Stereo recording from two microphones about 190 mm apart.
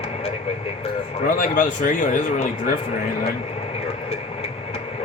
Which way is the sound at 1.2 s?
45° left (ahead or behind).